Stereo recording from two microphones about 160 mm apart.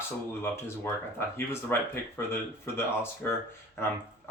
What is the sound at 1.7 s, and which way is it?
Speech, 15° left (ahead or behind).